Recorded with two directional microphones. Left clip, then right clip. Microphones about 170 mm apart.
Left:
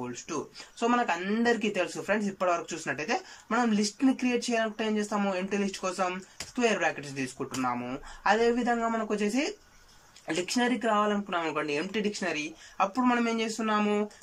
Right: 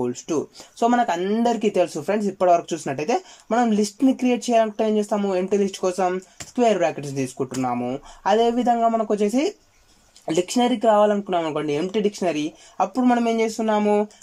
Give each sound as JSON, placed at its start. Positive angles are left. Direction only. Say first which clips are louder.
{"t": 0.0, "sound": "speech", "louder": "right 11 dB", "side_deg": -40}